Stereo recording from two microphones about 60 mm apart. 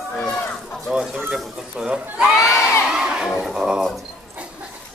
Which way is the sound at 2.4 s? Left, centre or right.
Left.